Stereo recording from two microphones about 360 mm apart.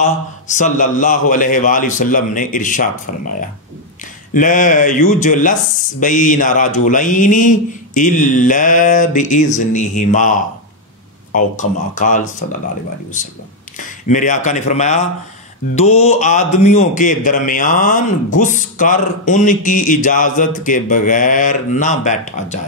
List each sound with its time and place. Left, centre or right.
0.0 s a man's voice: centre
13.7 s a man's voice: left